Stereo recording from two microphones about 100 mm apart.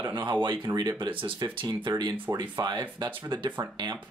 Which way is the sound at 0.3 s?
50° right (ahead or behind).